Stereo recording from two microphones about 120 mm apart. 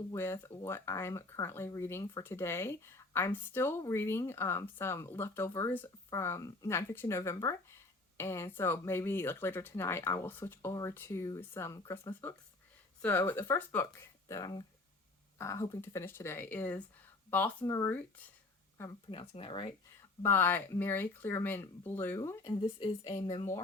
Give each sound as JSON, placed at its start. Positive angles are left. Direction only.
{"t": 0.1, "sound": "speech", "side_deg": 20}
{"t": 13.0, "sound": "speech", "side_deg": 15}
{"t": 19.3, "sound": "speech", "side_deg": 50}
{"t": 20.0, "sound": "speech", "side_deg": 15}
{"t": 22.4, "sound": "a woman's voice", "side_deg": 40}